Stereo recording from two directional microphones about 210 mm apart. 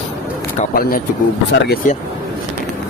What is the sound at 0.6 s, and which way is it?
Speech, 40° left (ahead or behind).